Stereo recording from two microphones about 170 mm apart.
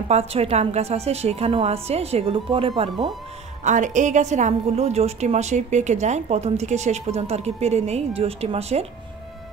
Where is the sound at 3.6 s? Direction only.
45° right (ahead or behind).